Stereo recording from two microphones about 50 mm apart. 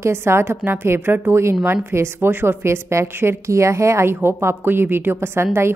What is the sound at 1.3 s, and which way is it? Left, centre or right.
Speech, right.